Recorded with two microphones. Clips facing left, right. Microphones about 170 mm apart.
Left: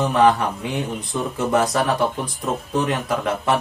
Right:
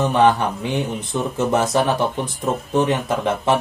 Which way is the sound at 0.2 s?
Centre (ahead or behind).